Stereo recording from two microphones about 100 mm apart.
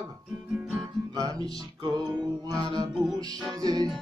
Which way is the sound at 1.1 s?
35° right (ahead or behind).